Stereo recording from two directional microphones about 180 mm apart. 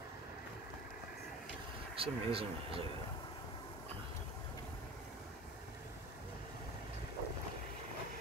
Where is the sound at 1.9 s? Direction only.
30° right (ahead or behind).